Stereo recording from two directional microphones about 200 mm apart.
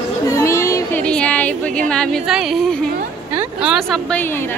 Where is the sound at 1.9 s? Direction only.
5° left (ahead or behind).